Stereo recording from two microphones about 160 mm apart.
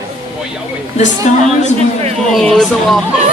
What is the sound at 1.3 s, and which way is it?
Speech, 50° left (ahead or behind).